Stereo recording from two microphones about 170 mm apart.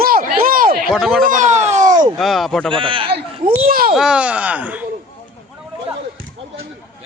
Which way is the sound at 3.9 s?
5° right (ahead or behind).